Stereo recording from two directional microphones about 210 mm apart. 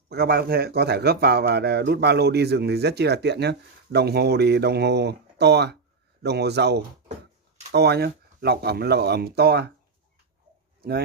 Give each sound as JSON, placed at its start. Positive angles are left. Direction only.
{"t": 0.1, "sound": "speech", "side_deg": -50}